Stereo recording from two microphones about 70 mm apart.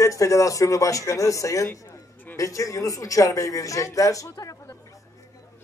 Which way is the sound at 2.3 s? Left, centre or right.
Left.